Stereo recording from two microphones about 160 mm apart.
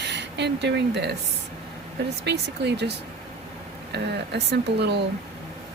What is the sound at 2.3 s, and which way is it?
Speech, 90° right.